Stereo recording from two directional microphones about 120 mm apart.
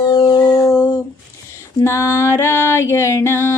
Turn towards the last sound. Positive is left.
turn(degrees=20)  # may be behind; listen again after turning